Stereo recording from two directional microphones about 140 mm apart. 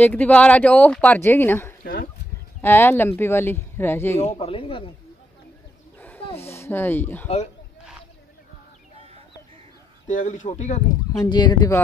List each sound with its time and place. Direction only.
0.0 s speech: 10° left (ahead or behind)
1.8 s a sound: 90° left
2.6 s speech: 15° left (ahead or behind)
4.2 s speech: 45° left (ahead or behind)
5.9 s roaring cats: 15° left (ahead or behind)
6.2 s a sound: 45° left (ahead or behind)
6.5 s speech: 15° left (ahead or behind)
10.0 s speech: 65° left (ahead or behind)
11.1 s speech: 30° left (ahead or behind)